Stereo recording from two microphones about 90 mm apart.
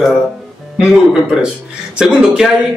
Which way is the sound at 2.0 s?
10° right (ahead or behind).